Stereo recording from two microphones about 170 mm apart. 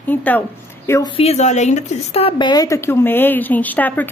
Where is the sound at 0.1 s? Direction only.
10° left (ahead or behind).